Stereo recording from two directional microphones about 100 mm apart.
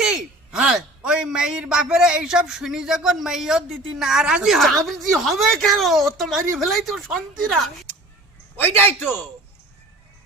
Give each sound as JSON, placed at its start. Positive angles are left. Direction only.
{"t": 0.0, "sound": "speech", "side_deg": -10}
{"t": 8.5, "sound": "a man's voice", "side_deg": 20}